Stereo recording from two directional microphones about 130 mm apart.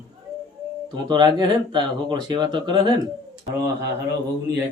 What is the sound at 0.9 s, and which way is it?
Speech, 35° right (ahead or behind).